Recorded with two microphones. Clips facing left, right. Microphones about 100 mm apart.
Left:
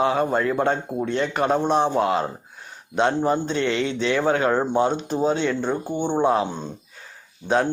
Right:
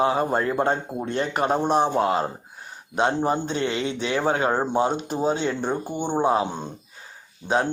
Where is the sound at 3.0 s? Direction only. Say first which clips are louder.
Left 2 dB; 20° right (ahead or behind).